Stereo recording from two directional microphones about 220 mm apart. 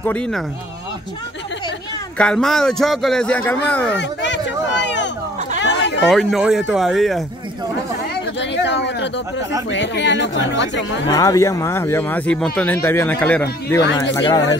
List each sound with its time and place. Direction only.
0.0 s speech: 5° left (ahead or behind)
2.1 s speech: 5° left (ahead or behind)
4.0 s a sound: 55° left (ahead or behind)
6.0 s speech: centre (ahead or behind)
8.4 s speech: 55° left (ahead or behind)
11.1 s speech: 15° left (ahead or behind)